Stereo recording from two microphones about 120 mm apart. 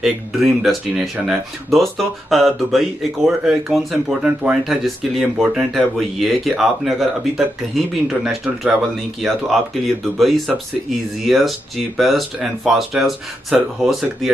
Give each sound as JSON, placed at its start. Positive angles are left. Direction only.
{"t": 0.0, "sound": "speech", "side_deg": 0}